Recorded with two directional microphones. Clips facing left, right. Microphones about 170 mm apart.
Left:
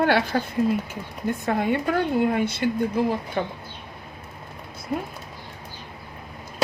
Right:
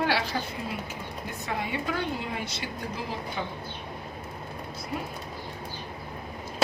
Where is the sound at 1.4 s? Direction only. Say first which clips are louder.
Left 7 dB; 50° left (ahead or behind).